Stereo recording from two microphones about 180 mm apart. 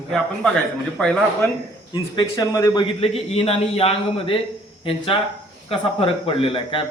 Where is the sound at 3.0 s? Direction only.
35° left (ahead or behind).